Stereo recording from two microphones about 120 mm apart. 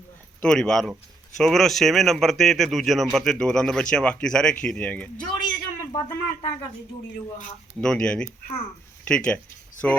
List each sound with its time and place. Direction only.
0.4 s speech: 5° left (ahead or behind)
5.1 s a sound: 40° left (ahead or behind)
7.8 s speech: 5° left (ahead or behind)